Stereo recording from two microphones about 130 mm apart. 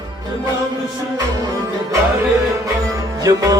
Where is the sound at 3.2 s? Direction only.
25° right (ahead or behind).